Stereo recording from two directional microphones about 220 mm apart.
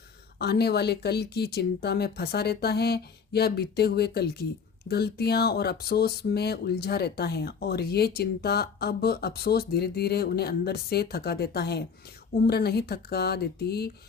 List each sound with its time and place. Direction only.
0.3 s speech: 45° left (ahead or behind)